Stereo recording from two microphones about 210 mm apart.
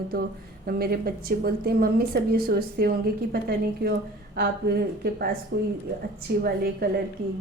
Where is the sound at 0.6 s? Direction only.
45° right (ahead or behind).